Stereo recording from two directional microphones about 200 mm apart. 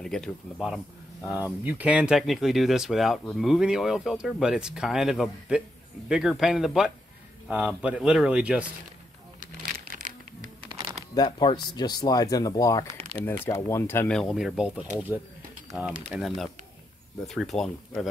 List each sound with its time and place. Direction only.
0.0 s speech: centre (ahead or behind)
9.8 s a sound: 40° right (ahead or behind)
11.1 s speech: 20° left (ahead or behind); by 14.9 s 5° right (ahead or behind)
16.1 s speech: centre (ahead or behind)